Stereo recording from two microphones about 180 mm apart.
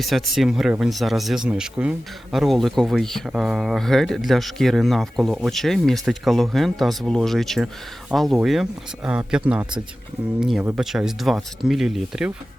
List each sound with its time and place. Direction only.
0.0 s speech: centre (ahead or behind)